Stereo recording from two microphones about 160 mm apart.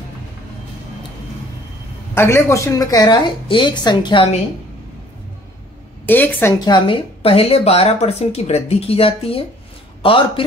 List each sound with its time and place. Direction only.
2.1 s a woman's voice: 15° left (ahead or behind); by 4.4 s 35° left (ahead or behind)
6.0 s a woman's voice: 10° left (ahead or behind)
6.6 s speech: 30° left (ahead or behind)